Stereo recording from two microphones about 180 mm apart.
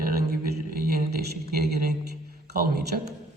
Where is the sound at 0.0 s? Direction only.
55° right (ahead or behind).